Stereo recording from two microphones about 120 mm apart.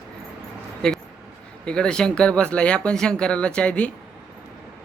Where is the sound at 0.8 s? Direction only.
5° left (ahead or behind).